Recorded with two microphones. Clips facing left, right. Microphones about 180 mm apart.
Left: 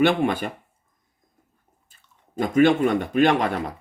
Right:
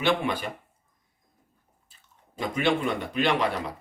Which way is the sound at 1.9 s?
45° left (ahead or behind).